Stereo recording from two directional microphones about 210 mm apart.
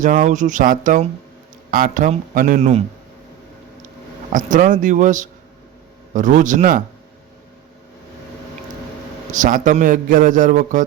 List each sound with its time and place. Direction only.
0.0 s a man's voice: 35° right (ahead or behind)
4.3 s a man's voice: 40° right (ahead or behind)
9.3 s a man's voice: 40° right (ahead or behind)